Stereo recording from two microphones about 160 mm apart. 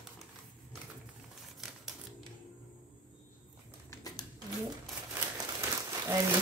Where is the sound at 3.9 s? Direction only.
25° left (ahead or behind).